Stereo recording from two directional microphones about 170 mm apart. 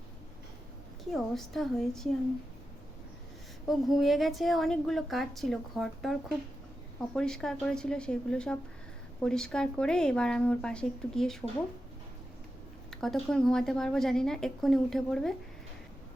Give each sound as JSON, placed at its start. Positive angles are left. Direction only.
{"t": 1.1, "sound": "a woman's voice", "side_deg": 0}
{"t": 3.7, "sound": "a woman's voice", "side_deg": 0}
{"t": 12.9, "sound": "a woman's voice", "side_deg": 5}